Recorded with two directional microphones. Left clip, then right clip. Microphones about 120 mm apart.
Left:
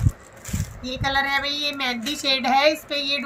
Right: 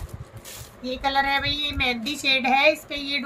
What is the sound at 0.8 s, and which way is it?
A woman's voice, 10° left (ahead or behind).